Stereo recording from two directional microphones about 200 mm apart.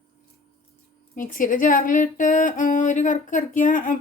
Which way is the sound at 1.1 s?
45° left (ahead or behind).